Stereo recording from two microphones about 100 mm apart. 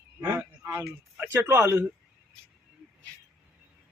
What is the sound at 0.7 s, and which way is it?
Speech, 15° right (ahead or behind).